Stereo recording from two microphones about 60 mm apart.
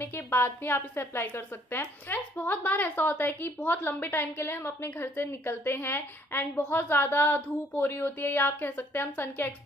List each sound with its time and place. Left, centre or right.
0.0 s a woman's voice: left